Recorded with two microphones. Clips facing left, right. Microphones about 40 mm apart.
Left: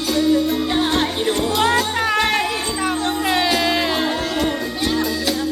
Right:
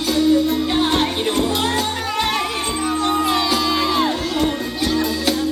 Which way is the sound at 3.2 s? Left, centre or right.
Left.